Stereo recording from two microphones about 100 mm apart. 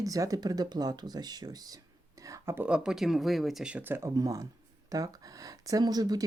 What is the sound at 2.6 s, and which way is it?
Speech, 10° right (ahead or behind).